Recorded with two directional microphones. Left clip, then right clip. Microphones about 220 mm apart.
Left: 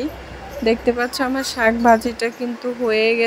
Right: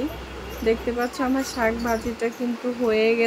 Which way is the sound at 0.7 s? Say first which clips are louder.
Left 5 dB; 30° left (ahead or behind).